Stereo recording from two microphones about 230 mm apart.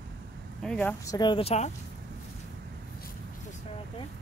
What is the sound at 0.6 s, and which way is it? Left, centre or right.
Speech, centre.